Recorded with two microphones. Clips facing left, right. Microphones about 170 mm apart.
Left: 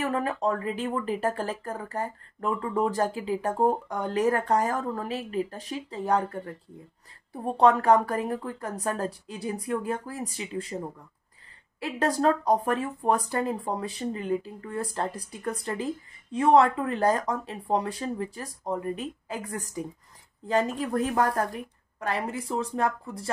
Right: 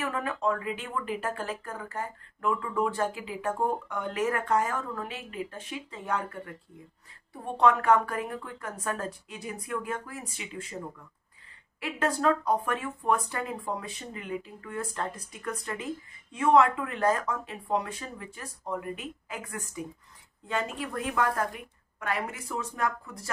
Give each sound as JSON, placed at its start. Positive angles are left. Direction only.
{"t": 0.0, "sound": "speech", "side_deg": 35}
{"t": 11.8, "sound": "speech", "side_deg": 35}